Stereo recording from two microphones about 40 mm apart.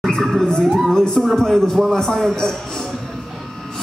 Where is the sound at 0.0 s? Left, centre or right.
Centre.